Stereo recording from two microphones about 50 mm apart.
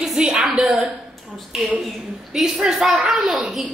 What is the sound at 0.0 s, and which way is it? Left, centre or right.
Speech, centre.